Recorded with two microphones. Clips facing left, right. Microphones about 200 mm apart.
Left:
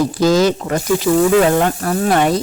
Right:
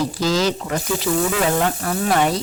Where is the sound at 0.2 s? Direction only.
55° left (ahead or behind).